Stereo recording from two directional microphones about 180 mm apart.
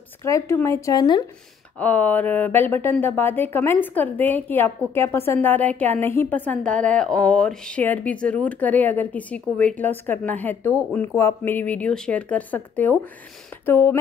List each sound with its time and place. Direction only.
0.2 s speech: 15° left (ahead or behind)
1.8 s speech: 10° left (ahead or behind)